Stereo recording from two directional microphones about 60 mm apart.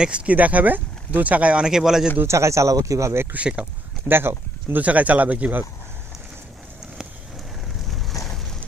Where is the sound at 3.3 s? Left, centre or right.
Centre.